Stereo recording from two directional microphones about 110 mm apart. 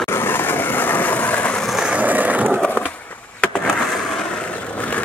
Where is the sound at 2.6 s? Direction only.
10° left (ahead or behind).